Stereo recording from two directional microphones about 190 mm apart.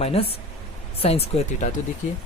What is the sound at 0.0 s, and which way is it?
Speech, 30° left (ahead or behind).